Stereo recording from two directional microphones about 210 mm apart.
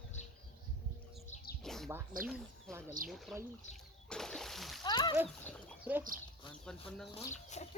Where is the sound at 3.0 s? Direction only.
40° right (ahead or behind).